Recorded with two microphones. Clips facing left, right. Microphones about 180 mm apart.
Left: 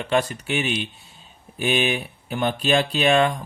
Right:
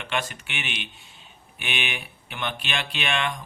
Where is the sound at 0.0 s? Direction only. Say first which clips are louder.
Left 8 dB; 35° left (ahead or behind).